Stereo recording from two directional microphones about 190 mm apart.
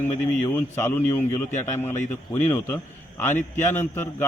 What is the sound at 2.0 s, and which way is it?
Speech, 40° left (ahead or behind).